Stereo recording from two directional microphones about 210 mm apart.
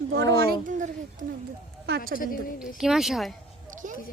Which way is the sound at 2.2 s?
40° left (ahead or behind).